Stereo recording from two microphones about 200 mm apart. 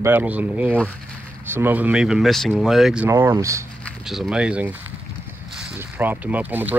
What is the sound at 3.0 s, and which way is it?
Speech, 10° right (ahead or behind).